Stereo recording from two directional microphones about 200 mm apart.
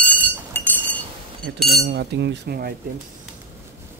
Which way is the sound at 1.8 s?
55° right (ahead or behind).